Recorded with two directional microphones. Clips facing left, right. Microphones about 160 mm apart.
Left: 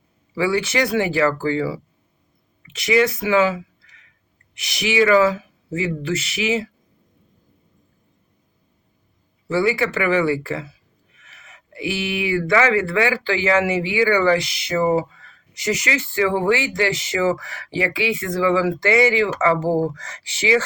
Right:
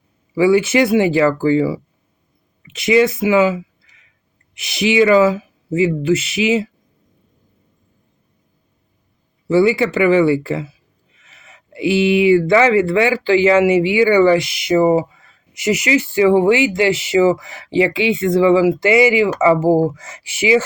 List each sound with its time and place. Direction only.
0.3 s speech: 20° right (ahead or behind)
4.7 s speech: 25° right (ahead or behind)
9.5 s speech: 20° right (ahead or behind)